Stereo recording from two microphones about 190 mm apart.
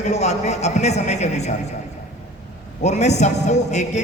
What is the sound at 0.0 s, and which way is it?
A man's voice, 35° left (ahead or behind).